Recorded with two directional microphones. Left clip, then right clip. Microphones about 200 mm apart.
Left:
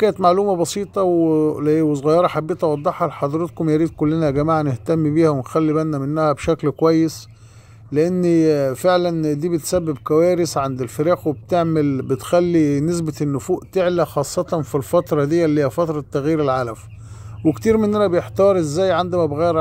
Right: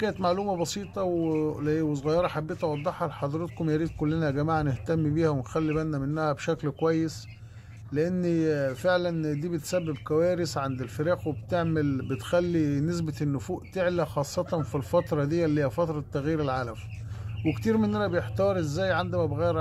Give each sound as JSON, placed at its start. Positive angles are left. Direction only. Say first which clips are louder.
{"t": 0.0, "sound": "speech", "louder": "left 12 dB", "side_deg": 35}